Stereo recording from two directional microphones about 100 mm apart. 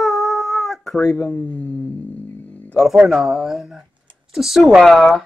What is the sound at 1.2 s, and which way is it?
Speech, 15° left (ahead or behind).